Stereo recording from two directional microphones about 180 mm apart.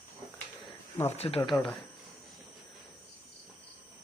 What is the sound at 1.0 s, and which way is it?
Speech, 35° left (ahead or behind).